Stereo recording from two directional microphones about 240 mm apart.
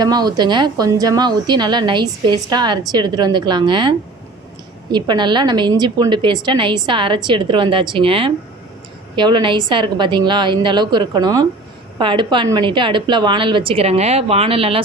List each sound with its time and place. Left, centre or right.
0.0 s a woman's voice: centre